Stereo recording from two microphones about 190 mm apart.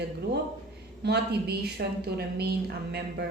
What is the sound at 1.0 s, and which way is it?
A woman's voice, 55° right (ahead or behind).